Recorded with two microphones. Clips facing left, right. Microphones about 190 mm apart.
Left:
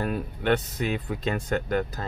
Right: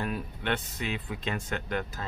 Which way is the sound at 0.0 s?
40° left (ahead or behind).